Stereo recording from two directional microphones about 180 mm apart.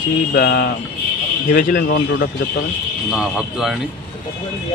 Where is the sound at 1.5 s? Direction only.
50° left (ahead or behind).